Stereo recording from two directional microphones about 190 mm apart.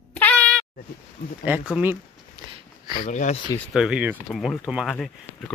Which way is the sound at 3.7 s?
5° right (ahead or behind).